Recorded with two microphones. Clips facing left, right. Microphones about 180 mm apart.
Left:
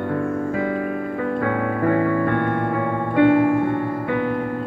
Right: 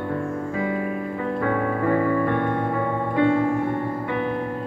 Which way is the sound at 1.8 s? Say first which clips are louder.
Left 2 dB; 55° left (ahead or behind).